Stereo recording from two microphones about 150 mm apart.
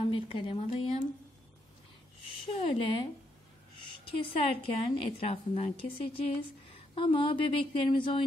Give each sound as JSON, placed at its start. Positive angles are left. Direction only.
{"t": 0.1, "sound": "a woman's voice", "side_deg": 35}
{"t": 2.5, "sound": "a woman's voice", "side_deg": 40}